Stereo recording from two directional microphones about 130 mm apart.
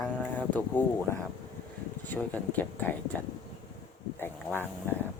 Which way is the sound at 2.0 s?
15° left (ahead or behind).